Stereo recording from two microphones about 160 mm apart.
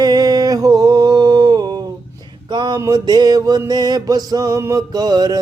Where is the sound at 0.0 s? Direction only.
25° right (ahead or behind).